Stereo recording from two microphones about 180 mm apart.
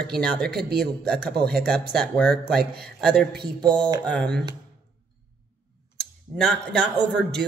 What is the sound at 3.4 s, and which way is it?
Speech, 25° right (ahead or behind).